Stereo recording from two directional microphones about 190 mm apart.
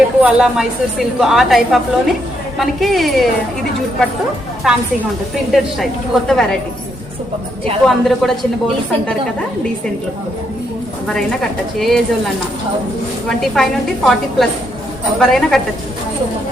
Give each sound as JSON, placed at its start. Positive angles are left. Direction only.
{"t": 0.2, "sound": "a woman's voice", "side_deg": -5}
{"t": 4.7, "sound": "a woman's voice", "side_deg": 0}
{"t": 7.9, "sound": "a woman's voice", "side_deg": 0}
{"t": 11.8, "sound": "a woman's voice", "side_deg": 0}
{"t": 13.2, "sound": "a woman's voice", "side_deg": 0}